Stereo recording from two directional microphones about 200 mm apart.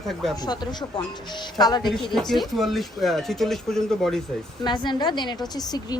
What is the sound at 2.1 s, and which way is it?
Speech, centre (ahead or behind).